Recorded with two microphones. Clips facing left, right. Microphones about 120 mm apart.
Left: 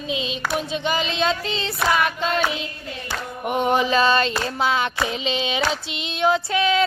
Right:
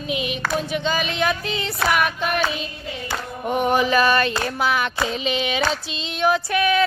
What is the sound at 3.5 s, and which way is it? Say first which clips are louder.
Child singing: right 1 dB; 20° left (ahead or behind).